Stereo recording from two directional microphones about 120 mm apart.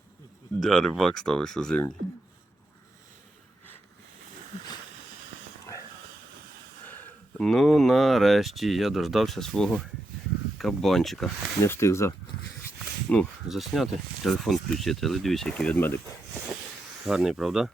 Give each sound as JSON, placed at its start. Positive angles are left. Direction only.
{"t": 0.6, "sound": "speech", "side_deg": 5}
{"t": 7.0, "sound": "speech", "side_deg": 5}
{"t": 11.6, "sound": "speech", "side_deg": 20}
{"t": 13.1, "sound": "speech", "side_deg": 10}
{"t": 13.5, "sound": "speech", "side_deg": 0}
{"t": 17.1, "sound": "speech", "side_deg": -5}